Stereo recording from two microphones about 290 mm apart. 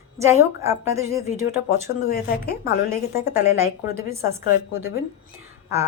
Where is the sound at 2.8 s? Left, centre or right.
Centre.